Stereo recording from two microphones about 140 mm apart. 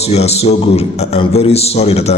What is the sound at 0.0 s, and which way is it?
A man's voice, 50° left (ahead or behind).